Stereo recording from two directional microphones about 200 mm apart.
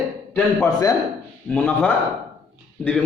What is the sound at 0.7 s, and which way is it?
Speech, 20° left (ahead or behind).